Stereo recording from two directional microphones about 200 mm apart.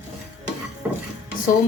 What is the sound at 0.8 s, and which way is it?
Dishes, 5° right (ahead or behind).